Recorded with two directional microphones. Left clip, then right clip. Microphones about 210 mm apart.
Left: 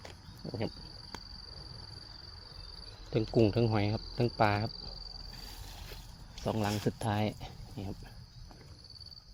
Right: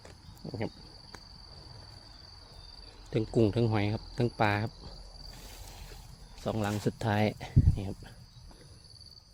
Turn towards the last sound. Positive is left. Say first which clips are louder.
# right 10 dB
turn(degrees=-35)  # may be behind; listen again after turning